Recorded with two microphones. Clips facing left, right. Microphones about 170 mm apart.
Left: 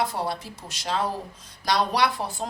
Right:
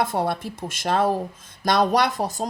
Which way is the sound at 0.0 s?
55° right (ahead or behind).